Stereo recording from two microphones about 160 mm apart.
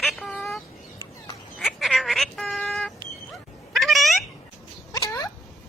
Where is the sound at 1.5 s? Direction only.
5° left (ahead or behind).